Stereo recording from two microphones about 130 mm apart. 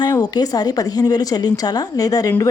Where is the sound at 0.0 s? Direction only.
30° left (ahead or behind).